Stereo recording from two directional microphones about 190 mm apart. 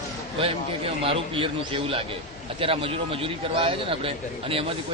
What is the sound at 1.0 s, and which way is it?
Speech, 30° right (ahead or behind).